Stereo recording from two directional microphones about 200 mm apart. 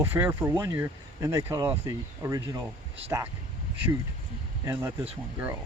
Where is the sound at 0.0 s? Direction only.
10° right (ahead or behind).